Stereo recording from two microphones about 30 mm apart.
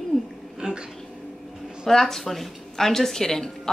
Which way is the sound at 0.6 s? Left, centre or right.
Right.